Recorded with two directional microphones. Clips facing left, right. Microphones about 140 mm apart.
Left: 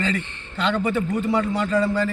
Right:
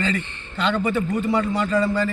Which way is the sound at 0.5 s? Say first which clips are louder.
Even; 20° left (ahead or behind).